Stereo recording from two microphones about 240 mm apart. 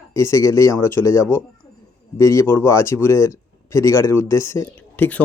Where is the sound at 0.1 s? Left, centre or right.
Centre.